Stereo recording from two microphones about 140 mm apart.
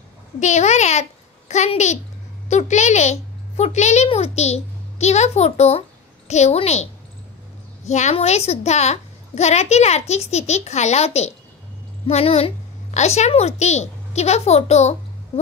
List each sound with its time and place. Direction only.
0.4 s a child's voice: 55° left (ahead or behind)